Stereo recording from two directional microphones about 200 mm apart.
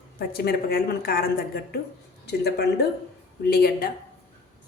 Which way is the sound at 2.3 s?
55° left (ahead or behind).